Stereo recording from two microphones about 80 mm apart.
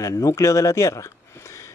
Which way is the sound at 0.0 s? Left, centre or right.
Left.